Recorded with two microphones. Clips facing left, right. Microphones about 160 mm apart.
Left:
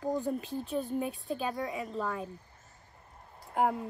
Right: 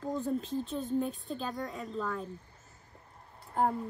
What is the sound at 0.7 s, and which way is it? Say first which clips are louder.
Speech: left 2 dB; 70° left (ahead or behind).